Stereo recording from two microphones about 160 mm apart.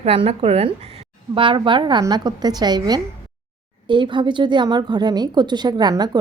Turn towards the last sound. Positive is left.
turn(degrees=-25)  # may be behind; listen again after turning